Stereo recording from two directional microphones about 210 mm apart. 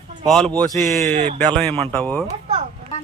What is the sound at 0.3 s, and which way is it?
Speech, 5° left (ahead or behind).